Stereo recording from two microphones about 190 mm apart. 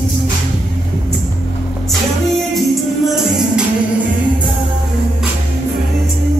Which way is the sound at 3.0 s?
Centre (ahead or behind).